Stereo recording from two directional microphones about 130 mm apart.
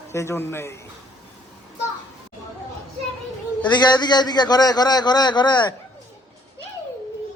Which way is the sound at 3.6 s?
35° left (ahead or behind).